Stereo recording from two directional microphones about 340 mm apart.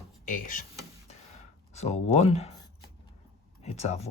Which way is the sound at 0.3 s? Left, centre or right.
Left.